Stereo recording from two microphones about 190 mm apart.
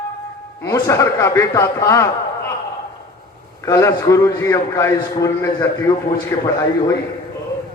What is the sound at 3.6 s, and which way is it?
A man's voice, 15° left (ahead or behind).